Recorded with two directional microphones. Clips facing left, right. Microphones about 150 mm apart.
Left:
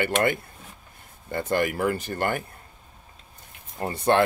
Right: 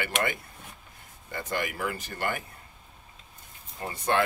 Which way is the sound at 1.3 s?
35° left (ahead or behind).